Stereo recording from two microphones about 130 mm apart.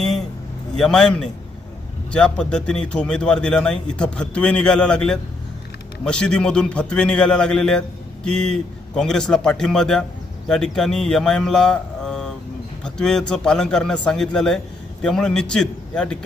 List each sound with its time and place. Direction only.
0.8 s a man's voice: 5° left (ahead or behind)